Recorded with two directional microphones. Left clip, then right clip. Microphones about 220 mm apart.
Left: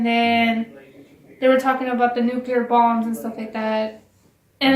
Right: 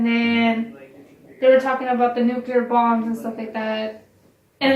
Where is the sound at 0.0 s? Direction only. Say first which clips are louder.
Left 3 dB; 50° left (ahead or behind).